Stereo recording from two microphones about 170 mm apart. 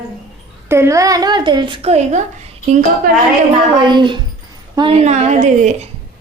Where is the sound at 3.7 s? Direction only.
25° right (ahead or behind).